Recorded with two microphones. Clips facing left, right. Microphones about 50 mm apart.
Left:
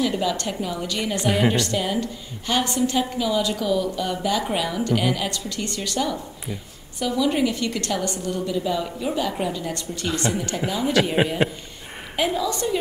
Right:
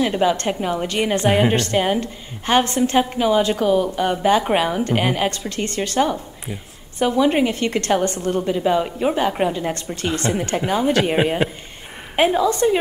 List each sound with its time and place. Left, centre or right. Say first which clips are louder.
0.0 s a woman's voice: right 5 dB; right
12.2 s a woman's voice: right 7 dB; right